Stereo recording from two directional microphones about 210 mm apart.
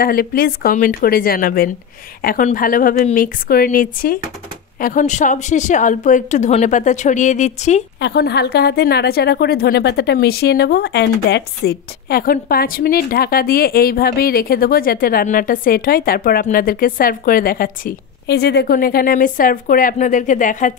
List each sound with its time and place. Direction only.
0.0 s a woman's voice: 45° left (ahead or behind)
8.0 s speech: 50° left (ahead or behind)